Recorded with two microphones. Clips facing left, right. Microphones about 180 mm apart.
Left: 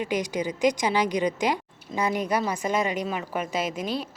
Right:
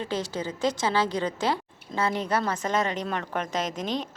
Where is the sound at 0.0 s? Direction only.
15° left (ahead or behind).